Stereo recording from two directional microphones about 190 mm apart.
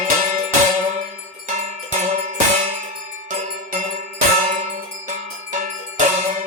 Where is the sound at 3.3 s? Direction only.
40° right (ahead or behind).